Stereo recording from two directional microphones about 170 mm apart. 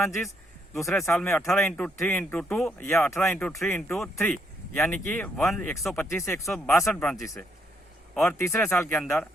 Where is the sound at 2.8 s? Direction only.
15° left (ahead or behind).